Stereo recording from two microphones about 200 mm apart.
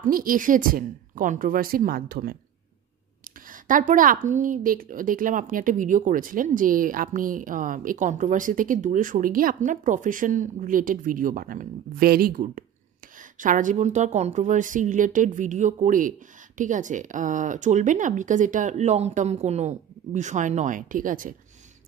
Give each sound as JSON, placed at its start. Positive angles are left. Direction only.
{"t": 0.0, "sound": "a woman's voice", "side_deg": -45}
{"t": 3.4, "sound": "a woman's voice", "side_deg": -40}